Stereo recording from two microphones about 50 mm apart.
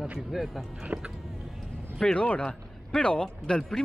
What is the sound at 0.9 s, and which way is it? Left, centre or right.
Music, right.